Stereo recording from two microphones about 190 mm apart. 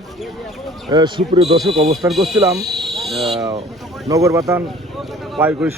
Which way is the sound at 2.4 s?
20° right (ahead or behind).